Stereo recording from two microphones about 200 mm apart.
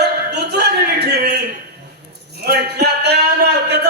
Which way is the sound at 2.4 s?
55° right (ahead or behind).